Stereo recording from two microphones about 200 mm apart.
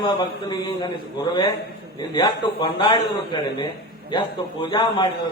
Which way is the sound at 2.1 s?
25° left (ahead or behind).